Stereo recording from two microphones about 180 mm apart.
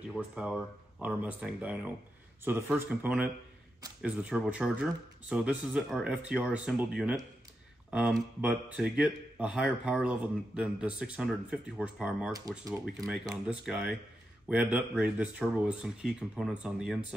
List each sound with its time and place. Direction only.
0.1 s speech: 5° right (ahead or behind)
12.3 s speech: 20° right (ahead or behind)
12.8 s speech: centre (ahead or behind)